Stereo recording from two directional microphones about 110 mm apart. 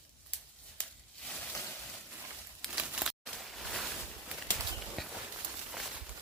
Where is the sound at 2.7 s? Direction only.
10° right (ahead or behind).